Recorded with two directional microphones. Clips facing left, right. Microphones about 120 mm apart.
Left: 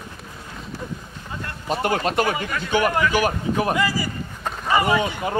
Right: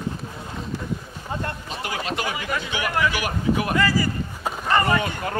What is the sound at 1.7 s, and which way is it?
Speech, 50° left (ahead or behind).